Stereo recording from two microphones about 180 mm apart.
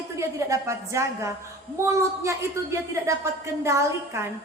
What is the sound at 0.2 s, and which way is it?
Speech, 15° right (ahead or behind).